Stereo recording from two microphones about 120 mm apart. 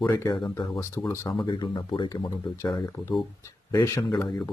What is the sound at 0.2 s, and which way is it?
Speech, 30° left (ahead or behind).